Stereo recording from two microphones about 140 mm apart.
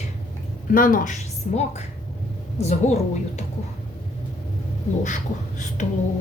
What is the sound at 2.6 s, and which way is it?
Speech, 50° left (ahead or behind).